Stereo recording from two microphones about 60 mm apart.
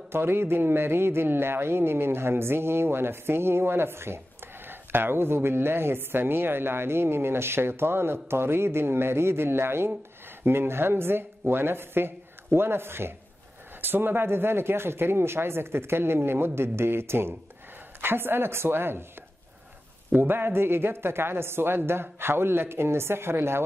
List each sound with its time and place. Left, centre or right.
0.1 s speech: right
20.1 s speech: right